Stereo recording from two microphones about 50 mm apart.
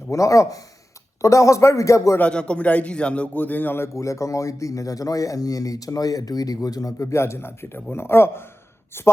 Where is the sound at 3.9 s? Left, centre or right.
Left.